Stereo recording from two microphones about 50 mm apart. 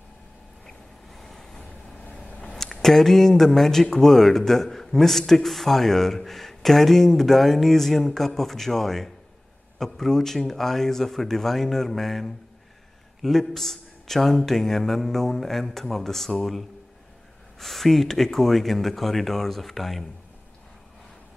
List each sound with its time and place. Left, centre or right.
0.7 s vehicle: centre
2.0 s vehicle: left
2.5 s speech: centre